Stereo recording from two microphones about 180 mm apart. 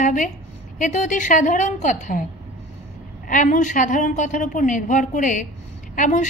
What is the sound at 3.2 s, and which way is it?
A woman's voice, 45° left (ahead or behind).